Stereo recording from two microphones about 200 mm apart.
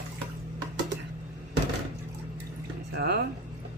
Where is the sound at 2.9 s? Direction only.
55° right (ahead or behind).